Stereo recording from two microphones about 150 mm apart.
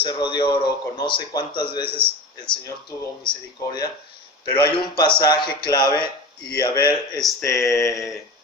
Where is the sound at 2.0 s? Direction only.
5° left (ahead or behind).